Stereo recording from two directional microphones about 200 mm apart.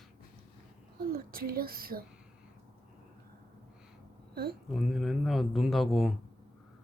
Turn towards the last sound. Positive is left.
turn(degrees=0)  # may be behind; listen again after turning